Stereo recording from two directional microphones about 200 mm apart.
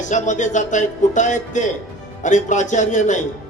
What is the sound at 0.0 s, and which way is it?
Speech, 40° left (ahead or behind).